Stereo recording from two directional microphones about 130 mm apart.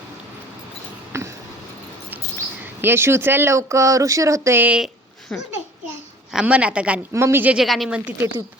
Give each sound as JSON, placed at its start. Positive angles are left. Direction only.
{"t": 1.1, "sound": "a sound", "side_deg": -20}
{"t": 2.6, "sound": "speech", "side_deg": -20}
{"t": 5.3, "sound": "a child's voice", "side_deg": 5}
{"t": 6.3, "sound": "a woman's voice", "side_deg": -10}
{"t": 7.1, "sound": "a woman's voice", "side_deg": -20}
{"t": 7.6, "sound": "a woman's voice", "side_deg": 0}